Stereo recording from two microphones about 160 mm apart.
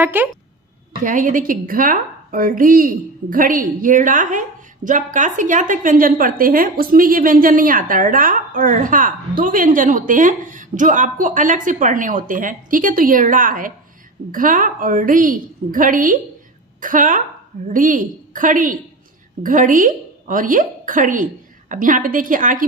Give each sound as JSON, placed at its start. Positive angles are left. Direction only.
{"t": 0.0, "sound": "speech", "side_deg": -10}
{"t": 1.0, "sound": "a woman's voice", "side_deg": -55}